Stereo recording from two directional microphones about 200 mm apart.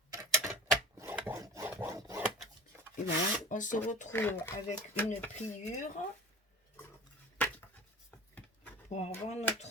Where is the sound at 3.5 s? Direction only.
40° left (ahead or behind).